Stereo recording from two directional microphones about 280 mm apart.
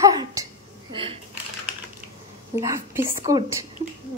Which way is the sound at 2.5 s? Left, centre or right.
Centre.